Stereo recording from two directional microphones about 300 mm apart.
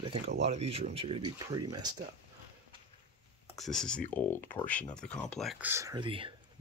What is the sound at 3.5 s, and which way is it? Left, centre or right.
Speech, centre.